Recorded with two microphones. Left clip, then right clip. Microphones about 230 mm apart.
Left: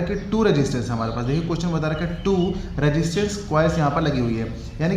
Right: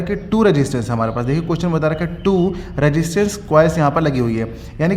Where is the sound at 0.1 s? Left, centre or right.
Right.